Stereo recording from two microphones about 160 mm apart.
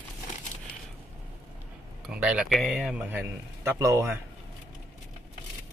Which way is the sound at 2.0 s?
5° right (ahead or behind).